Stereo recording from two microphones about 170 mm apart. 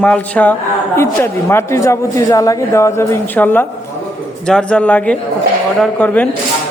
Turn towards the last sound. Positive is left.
turn(degrees=10)  # may be behind; listen again after turning